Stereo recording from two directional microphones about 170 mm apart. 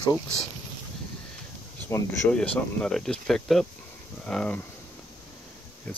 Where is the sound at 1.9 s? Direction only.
15° left (ahead or behind).